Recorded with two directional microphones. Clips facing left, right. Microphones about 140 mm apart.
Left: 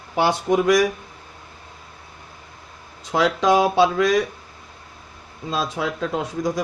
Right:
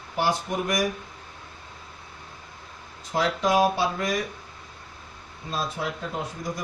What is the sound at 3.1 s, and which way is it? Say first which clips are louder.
A man's voice: left 6 dB; 90° left.